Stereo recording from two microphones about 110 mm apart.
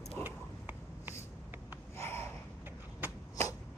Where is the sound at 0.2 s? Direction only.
15° right (ahead or behind).